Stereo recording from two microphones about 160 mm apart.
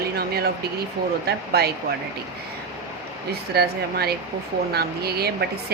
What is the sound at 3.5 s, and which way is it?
Speech, 85° right.